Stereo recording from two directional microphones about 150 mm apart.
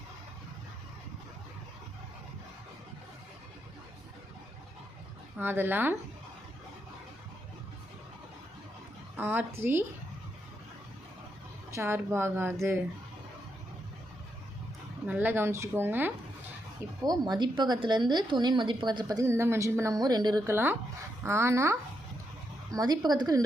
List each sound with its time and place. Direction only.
5.4 s speech: 15° right (ahead or behind)
9.1 s speech: 15° right (ahead or behind)
11.7 s speech: 15° right (ahead or behind)
15.0 s speech: 10° right (ahead or behind)
17.0 s speech: 25° right (ahead or behind)
20.5 s speech: 15° right (ahead or behind)